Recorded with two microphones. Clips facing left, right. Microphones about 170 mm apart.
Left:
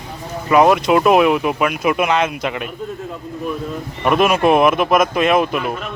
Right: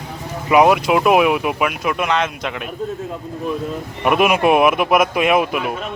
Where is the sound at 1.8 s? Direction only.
5° left (ahead or behind).